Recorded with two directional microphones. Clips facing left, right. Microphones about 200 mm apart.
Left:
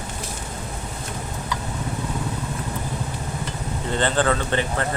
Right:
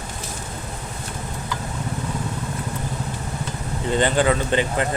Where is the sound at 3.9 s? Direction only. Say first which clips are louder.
Right 2 dB; 15° right (ahead or behind).